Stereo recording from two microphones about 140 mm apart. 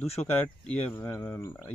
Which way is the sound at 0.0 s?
45° left (ahead or behind).